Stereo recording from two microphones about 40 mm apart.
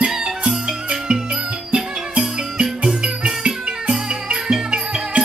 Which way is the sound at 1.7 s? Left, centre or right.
Right.